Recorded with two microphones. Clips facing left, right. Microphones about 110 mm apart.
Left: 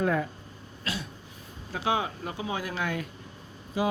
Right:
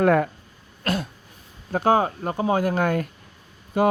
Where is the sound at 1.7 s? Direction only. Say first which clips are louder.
Right 9 dB; 45° right (ahead or behind).